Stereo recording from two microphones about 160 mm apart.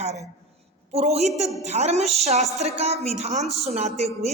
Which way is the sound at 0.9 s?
40° right (ahead or behind).